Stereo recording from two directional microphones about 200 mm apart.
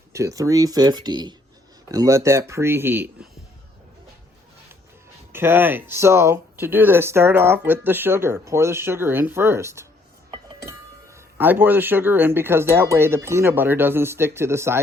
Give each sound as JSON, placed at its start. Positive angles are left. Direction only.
{"t": 0.1, "sound": "speech", "side_deg": -15}
{"t": 5.3, "sound": "speech", "side_deg": -10}